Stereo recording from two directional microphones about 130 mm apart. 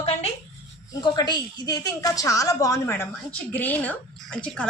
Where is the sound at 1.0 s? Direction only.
35° left (ahead or behind).